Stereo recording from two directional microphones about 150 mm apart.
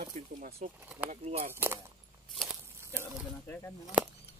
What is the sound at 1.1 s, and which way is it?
Speech, 45° right (ahead or behind).